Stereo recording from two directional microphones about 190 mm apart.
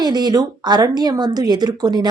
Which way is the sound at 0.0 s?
20° right (ahead or behind).